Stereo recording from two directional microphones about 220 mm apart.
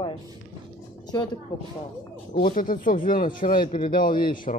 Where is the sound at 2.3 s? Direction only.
40° left (ahead or behind).